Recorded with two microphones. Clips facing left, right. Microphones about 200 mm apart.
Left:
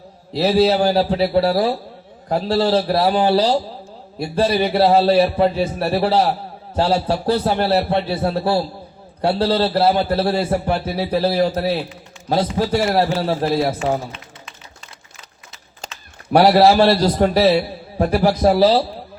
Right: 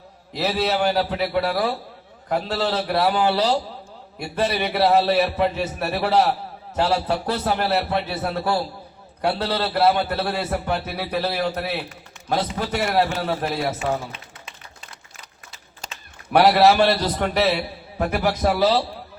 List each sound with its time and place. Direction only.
0.3 s a man's voice: 30° left (ahead or behind)
16.3 s a man's voice: 30° left (ahead or behind)